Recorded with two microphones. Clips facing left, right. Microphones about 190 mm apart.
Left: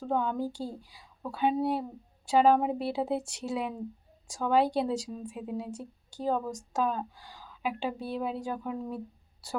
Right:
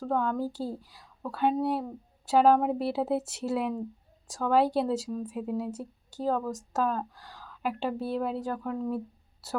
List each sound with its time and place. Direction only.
0.1 s speech: centre (ahead or behind)